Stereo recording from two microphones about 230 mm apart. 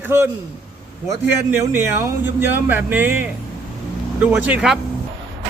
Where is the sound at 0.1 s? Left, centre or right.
Centre.